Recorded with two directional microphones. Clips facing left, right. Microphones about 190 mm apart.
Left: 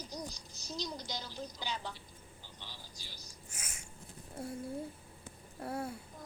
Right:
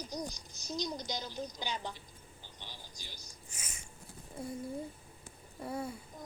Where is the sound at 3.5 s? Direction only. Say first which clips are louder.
Even; 5° left (ahead or behind).